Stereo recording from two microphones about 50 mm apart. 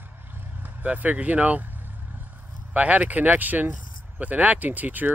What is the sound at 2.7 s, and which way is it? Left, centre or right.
Speech, right.